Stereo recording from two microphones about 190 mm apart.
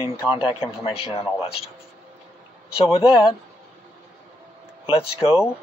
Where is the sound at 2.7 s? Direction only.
30° left (ahead or behind).